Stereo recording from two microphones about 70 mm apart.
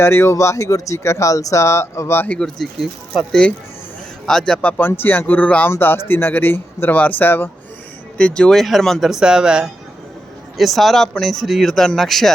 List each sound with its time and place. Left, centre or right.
0.0 s speech: left
2.7 s speech: centre
4.3 s a man's voice: centre
4.8 s speech: left
5.7 s speech: left
8.2 s speech: centre
10.6 s speech: centre